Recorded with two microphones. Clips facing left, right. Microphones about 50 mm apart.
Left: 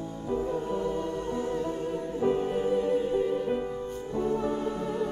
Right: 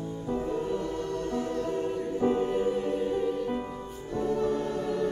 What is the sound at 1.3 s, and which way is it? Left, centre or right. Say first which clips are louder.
Music: even; centre.